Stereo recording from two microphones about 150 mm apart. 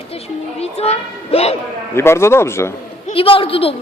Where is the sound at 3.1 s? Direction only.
40° left (ahead or behind).